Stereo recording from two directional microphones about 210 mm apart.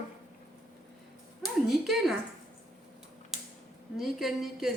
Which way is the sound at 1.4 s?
Centre (ahead or behind).